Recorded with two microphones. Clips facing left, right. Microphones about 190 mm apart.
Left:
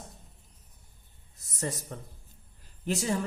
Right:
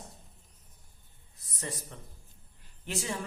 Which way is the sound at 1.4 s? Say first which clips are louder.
Left 5 dB; 45° left (ahead or behind).